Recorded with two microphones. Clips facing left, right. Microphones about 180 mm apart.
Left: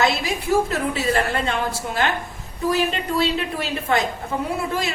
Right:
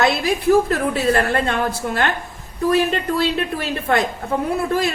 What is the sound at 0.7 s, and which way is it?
Speech, 55° right (ahead or behind).